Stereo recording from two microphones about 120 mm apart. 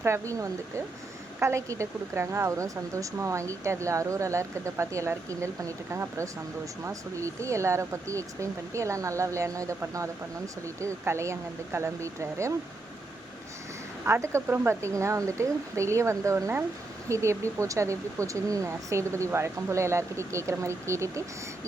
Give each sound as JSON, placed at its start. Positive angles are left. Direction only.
{"t": 0.0, "sound": "speech", "side_deg": -25}
{"t": 14.0, "sound": "speech", "side_deg": -20}